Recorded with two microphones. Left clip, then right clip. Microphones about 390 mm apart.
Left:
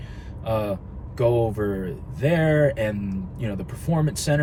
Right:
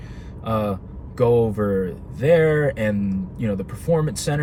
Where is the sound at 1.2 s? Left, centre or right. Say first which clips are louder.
Right 4 dB; centre.